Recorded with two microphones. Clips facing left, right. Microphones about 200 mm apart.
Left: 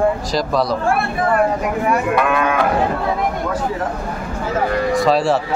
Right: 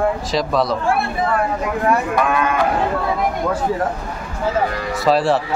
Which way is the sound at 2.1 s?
60° left (ahead or behind).